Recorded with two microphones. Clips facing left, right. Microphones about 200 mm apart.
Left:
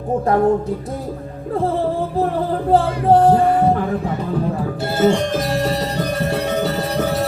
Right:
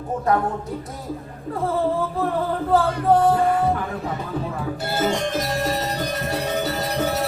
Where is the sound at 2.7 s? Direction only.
30° left (ahead or behind).